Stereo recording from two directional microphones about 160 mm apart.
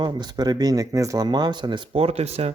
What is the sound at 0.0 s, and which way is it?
Speech, 25° right (ahead or behind).